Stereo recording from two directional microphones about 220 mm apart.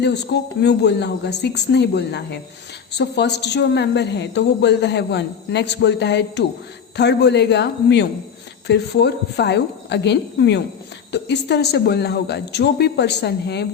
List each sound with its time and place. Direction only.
0.0 s a woman's voice: 50° left (ahead or behind)